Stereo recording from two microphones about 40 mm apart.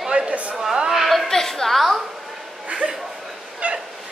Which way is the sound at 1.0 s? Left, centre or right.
Centre.